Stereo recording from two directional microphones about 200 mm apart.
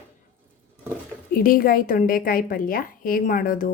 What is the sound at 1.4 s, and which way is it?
A woman's voice, 45° left (ahead or behind).